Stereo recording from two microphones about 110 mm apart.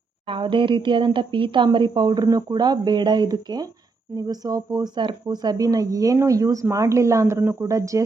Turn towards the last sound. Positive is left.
turn(degrees=-30)  # may be behind; listen again after turning